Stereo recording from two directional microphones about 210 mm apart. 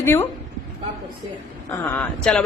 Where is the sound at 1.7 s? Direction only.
15° left (ahead or behind).